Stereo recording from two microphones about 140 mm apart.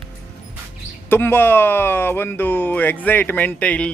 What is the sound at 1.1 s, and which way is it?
Speech, 15° left (ahead or behind).